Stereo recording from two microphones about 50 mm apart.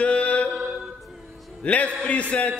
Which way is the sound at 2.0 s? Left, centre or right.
Left.